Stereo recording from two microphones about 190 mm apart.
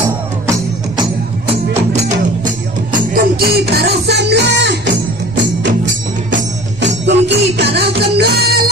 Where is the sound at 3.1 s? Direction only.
50° right (ahead or behind).